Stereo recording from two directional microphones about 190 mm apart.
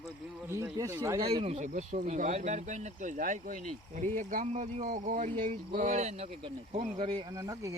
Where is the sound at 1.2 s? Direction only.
30° right (ahead or behind).